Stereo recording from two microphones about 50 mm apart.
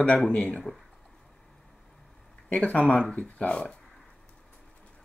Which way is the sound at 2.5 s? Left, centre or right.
Left.